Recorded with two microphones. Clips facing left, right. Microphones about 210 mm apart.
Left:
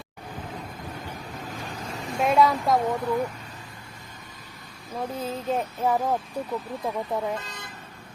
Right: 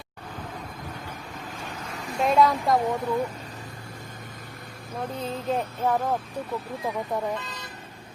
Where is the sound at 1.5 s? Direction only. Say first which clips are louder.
Left 1 dB; 35° left (ahead or behind).